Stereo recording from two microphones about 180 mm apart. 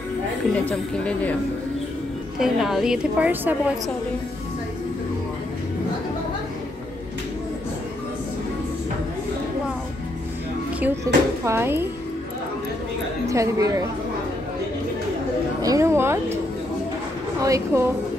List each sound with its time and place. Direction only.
0.7 s speech: 5° left (ahead or behind)
2.3 s a woman's voice: centre (ahead or behind)
11.1 s speech: 20° right (ahead or behind)
13.3 s a woman's voice: 15° right (ahead or behind)
15.6 s speech: 15° right (ahead or behind)
17.4 s speech: 15° right (ahead or behind)